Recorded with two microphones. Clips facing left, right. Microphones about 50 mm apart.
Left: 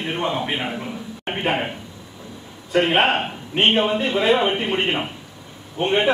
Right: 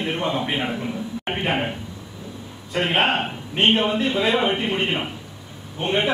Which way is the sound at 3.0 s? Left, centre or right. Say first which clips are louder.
Right 2 dB; left.